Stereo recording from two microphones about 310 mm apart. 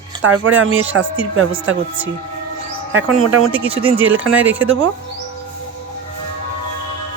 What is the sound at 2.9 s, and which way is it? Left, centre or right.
Speech, right.